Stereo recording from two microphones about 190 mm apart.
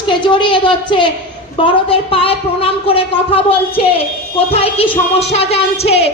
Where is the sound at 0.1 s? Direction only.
25° left (ahead or behind).